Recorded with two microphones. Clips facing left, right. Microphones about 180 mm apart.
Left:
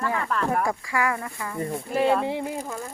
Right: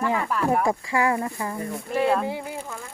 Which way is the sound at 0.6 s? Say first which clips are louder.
Right 3 dB; 25° right (ahead or behind).